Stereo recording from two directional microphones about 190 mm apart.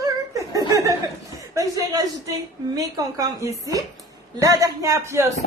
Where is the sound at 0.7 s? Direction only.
15° right (ahead or behind).